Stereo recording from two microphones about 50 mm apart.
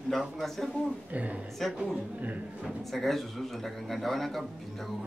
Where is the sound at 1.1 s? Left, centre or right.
Right.